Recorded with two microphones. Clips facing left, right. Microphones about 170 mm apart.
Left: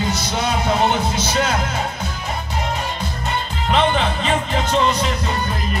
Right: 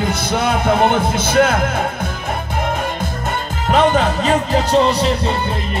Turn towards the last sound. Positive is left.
turn(degrees=-35)  # may be behind; listen again after turning